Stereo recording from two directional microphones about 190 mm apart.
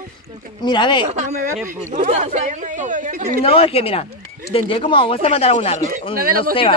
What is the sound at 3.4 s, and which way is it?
Speech, 30° left (ahead or behind).